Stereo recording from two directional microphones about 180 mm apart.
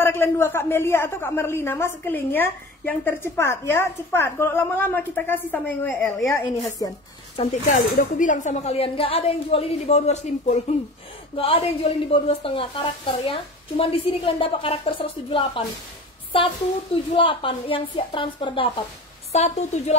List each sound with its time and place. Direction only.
0.0 s a woman's voice: 15° left (ahead or behind)
7.6 s speech: 45° left (ahead or behind); by 15.6 s 30° left (ahead or behind)
17.1 s speech: 30° left (ahead or behind)